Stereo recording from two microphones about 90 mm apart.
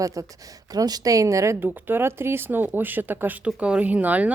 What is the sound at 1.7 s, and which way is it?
Speech, 20° right (ahead or behind).